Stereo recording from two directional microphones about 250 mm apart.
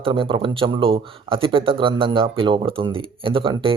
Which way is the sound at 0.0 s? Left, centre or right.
Centre.